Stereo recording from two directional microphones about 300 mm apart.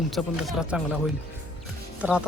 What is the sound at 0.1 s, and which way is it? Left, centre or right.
Speech, centre.